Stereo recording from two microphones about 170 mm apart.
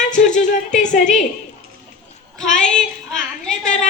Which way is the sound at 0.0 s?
45° left (ahead or behind).